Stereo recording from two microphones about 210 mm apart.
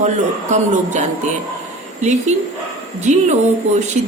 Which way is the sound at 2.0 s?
35° right (ahead or behind).